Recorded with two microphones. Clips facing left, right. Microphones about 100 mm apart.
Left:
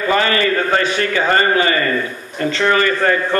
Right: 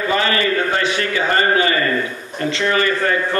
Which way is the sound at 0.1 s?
40° left (ahead or behind).